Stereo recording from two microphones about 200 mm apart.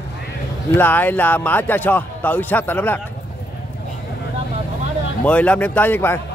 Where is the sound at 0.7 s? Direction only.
10° left (ahead or behind).